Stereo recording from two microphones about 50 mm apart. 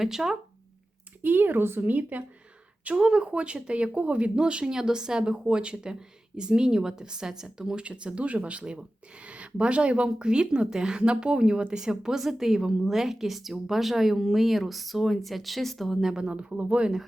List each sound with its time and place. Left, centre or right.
0.0 s speech: centre
1.2 s a woman's voice: right
2.8 s speech: centre
7.9 s speech: right
16.3 s speech: right